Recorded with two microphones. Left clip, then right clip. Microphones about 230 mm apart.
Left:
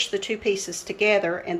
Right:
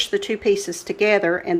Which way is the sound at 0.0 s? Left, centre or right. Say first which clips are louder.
Right 4 dB; right.